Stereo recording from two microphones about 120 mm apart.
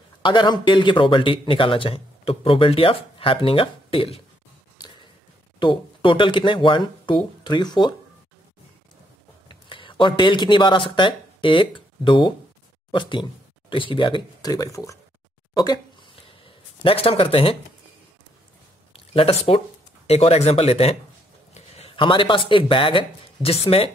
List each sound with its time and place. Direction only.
0.2 s a man's voice: 40° left (ahead or behind)
5.6 s speech: 45° left (ahead or behind)
9.5 s speech: 45° left (ahead or behind)
15.5 s a sound: 35° left (ahead or behind)
18.9 s speech: 50° left (ahead or behind)